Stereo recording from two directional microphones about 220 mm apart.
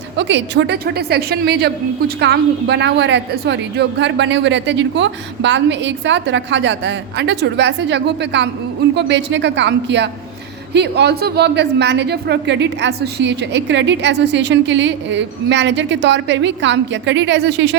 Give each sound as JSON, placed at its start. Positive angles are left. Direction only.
{"t": 0.2, "sound": "a woman's voice", "side_deg": -55}